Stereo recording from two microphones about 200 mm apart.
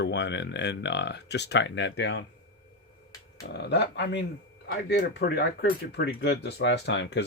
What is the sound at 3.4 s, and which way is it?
Speech, 60° left (ahead or behind).